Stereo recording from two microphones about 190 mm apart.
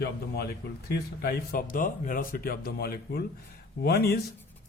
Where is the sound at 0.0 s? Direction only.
60° left (ahead or behind).